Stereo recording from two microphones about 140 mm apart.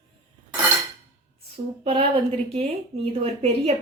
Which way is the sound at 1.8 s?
45° right (ahead or behind).